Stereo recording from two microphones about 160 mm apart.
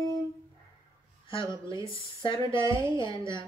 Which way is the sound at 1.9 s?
30° left (ahead or behind).